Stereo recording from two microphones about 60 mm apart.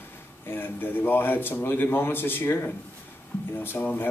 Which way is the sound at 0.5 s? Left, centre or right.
Left.